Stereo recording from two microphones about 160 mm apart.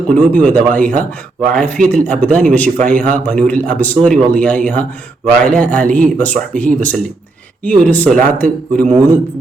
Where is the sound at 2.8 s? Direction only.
50° right (ahead or behind).